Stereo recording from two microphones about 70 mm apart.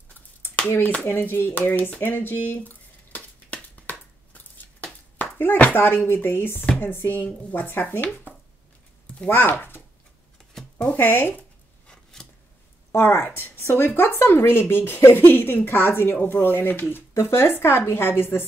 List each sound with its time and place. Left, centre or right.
0.6 s speech: left
1.7 s a sound: left
6.8 s speech: left
10.8 s speech: left
11.9 s scissors: centre
12.9 s speech: left